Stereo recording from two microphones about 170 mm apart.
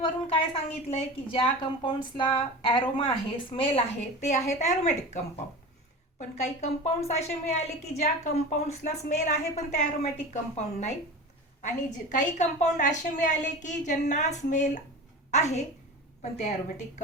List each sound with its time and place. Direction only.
0.0 s a woman's voice: 35° left (ahead or behind)